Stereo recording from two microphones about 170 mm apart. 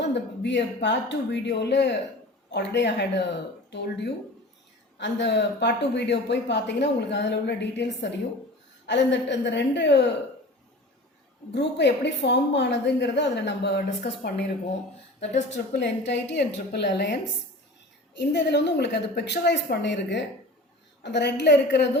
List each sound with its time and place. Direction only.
0.0 s speech: 90° left
11.5 s speech: 90° left
14.0 s speech: 70° left (ahead or behind)
15.2 s speech: 40° left (ahead or behind)
15.8 s speech: 90° left
18.2 s speech: 90° left